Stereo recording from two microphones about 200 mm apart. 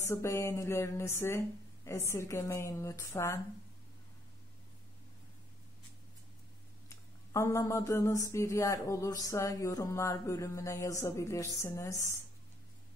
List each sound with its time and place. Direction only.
0.0 s speech: 15° left (ahead or behind)
6.9 s speech: 15° left (ahead or behind)